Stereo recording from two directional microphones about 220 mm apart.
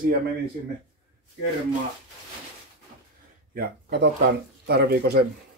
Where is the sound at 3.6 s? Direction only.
50° right (ahead or behind).